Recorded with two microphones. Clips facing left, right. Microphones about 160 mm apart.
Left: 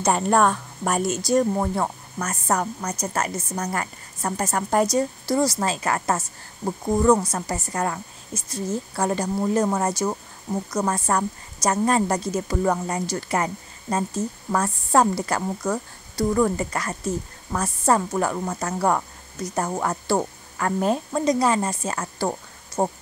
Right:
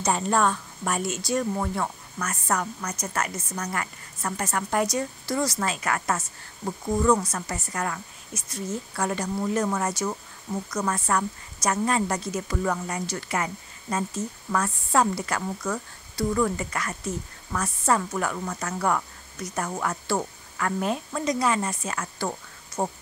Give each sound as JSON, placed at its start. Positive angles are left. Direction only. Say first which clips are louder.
{"t": 0.0, "sound": "speech", "louder": "left 4 dB", "side_deg": 55}